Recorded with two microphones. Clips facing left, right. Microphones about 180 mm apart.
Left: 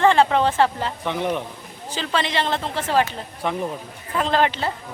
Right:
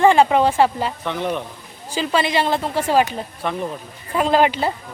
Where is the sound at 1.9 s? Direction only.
10° right (ahead or behind).